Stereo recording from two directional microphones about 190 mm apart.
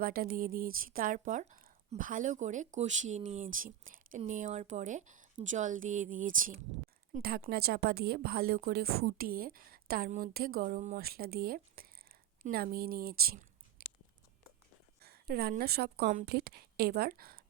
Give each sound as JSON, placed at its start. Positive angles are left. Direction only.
{"t": 0.0, "sound": "speech", "side_deg": -50}
{"t": 15.0, "sound": "a woman's voice", "side_deg": -55}